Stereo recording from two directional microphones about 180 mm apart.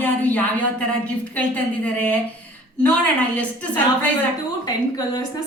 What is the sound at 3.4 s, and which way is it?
Speech, 10° left (ahead or behind).